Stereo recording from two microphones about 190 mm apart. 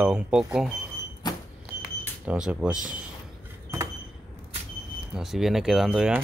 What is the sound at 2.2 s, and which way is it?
Speech, 5° right (ahead or behind).